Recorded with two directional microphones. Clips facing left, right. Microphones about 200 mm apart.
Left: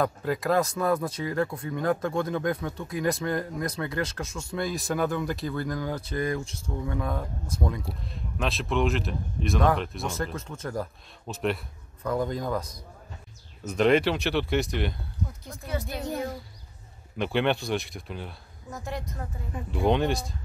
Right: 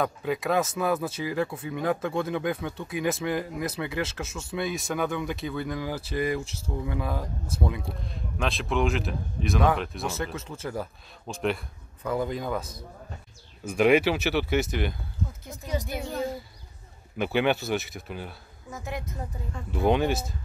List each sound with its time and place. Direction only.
0.0 s speech: centre (ahead or behind)
13.7 s speech: 10° right (ahead or behind)
15.6 s a woman's voice: 15° right (ahead or behind)
17.2 s speech: 5° right (ahead or behind)